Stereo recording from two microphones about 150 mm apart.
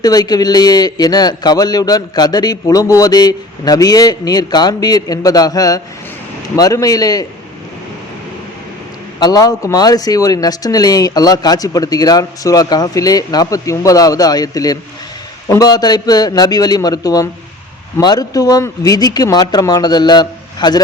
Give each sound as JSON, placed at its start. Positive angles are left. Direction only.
{"t": 0.0, "sound": "a man's voice", "side_deg": 25}
{"t": 9.2, "sound": "a man's voice", "side_deg": 25}